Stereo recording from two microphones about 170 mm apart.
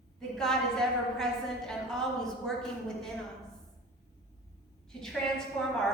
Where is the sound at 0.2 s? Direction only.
5° left (ahead or behind).